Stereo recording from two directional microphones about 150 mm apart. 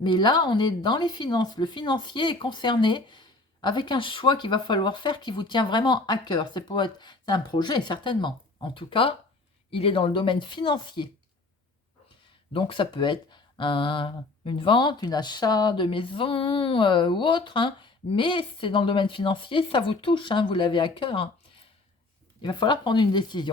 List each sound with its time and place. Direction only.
0.0 s speech: 30° left (ahead or behind)
12.5 s speech: 35° left (ahead or behind)
22.4 s speech: 30° left (ahead or behind)